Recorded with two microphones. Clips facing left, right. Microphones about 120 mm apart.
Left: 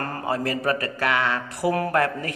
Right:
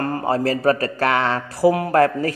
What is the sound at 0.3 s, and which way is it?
A man's voice, 35° right (ahead or behind).